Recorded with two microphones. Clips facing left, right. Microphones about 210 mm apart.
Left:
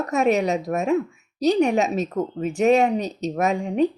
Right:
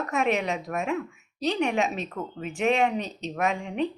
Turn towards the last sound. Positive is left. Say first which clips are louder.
# left 6 dB
turn(degrees=40)  # may be behind; listen again after turning